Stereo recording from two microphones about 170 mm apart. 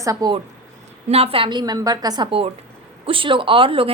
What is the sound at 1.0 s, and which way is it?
A woman's voice, 35° right (ahead or behind).